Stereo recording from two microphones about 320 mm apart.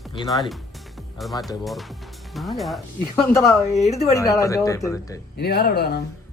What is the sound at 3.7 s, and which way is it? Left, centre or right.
Speech, left.